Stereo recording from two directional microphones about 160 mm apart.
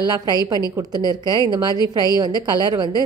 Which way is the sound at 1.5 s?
25° right (ahead or behind).